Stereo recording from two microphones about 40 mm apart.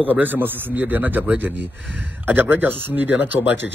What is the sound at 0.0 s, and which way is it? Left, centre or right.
A man's voice, right.